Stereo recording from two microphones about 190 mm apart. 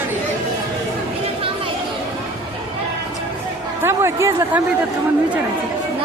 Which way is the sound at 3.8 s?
15° right (ahead or behind).